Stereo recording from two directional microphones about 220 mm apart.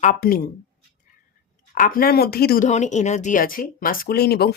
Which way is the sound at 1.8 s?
40° left (ahead or behind).